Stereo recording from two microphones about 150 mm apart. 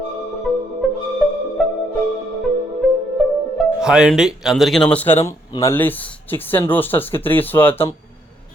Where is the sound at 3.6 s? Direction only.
5° right (ahead or behind).